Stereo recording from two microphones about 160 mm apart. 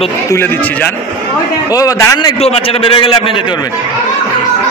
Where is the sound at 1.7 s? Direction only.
20° left (ahead or behind).